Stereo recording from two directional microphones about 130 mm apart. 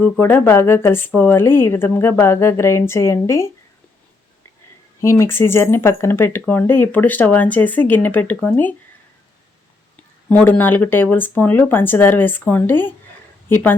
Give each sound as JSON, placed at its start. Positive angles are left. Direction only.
{"t": 0.0, "sound": "speech", "side_deg": 15}
{"t": 4.9, "sound": "speech", "side_deg": 20}
{"t": 10.2, "sound": "speech", "side_deg": 10}